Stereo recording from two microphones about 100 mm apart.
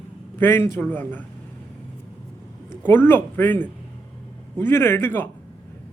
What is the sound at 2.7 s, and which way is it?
A man's voice, 20° left (ahead or behind).